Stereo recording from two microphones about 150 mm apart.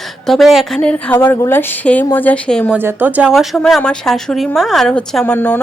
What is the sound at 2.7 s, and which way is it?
Speech, 15° right (ahead or behind).